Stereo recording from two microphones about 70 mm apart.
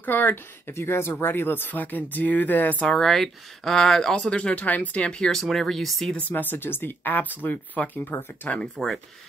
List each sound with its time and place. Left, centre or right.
0.0 s speech: left
2.9 s speech: centre
6.1 s speech: left